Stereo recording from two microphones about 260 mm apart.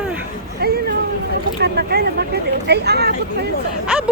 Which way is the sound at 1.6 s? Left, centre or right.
Right.